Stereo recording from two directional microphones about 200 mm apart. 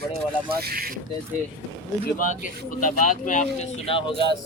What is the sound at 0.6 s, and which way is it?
Speech, 50° right (ahead or behind).